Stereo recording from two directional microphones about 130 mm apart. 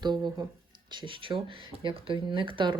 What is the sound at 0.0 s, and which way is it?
Speech, 35° right (ahead or behind).